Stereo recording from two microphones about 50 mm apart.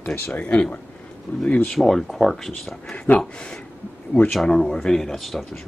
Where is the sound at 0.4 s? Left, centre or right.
Left.